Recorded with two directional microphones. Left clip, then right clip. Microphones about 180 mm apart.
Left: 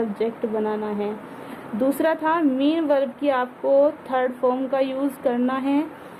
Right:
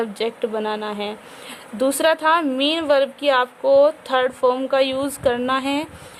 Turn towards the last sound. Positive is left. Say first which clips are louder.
# right 2 dB
turn(degrees=-40)  # may be behind; listen again after turning